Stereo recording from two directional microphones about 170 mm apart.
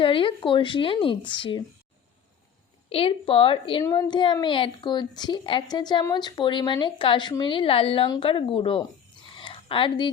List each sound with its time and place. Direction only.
0.0 s a woman's voice: 30° left (ahead or behind)
2.9 s a woman's voice: 30° left (ahead or behind)
3.8 s a woman's voice: 20° left (ahead or behind)
9.4 s a sound: 30° left (ahead or behind)